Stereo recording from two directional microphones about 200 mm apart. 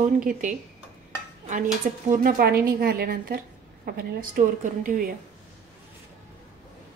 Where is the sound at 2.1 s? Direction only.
45° right (ahead or behind).